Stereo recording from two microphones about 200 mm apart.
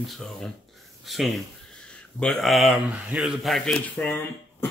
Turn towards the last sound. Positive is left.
turn(degrees=10)  # may be behind; listen again after turning